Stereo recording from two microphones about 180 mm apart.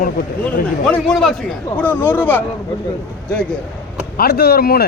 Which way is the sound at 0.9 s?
5° left (ahead or behind).